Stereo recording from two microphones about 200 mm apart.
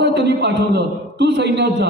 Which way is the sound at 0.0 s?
60° right (ahead or behind).